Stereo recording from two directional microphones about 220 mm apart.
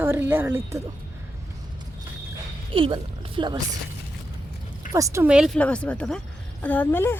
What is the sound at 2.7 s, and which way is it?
Speech, 25° right (ahead or behind).